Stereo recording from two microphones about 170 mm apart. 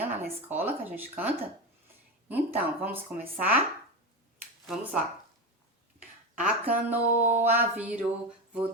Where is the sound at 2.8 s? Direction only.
10° right (ahead or behind).